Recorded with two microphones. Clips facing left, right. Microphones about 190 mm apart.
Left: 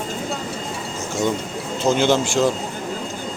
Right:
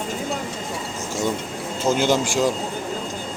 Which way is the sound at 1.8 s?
10° right (ahead or behind).